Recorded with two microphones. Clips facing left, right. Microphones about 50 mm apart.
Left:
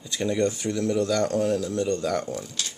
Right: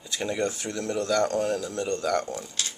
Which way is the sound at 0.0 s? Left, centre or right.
Centre.